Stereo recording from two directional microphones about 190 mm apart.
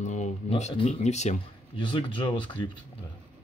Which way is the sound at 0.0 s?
40° left (ahead or behind).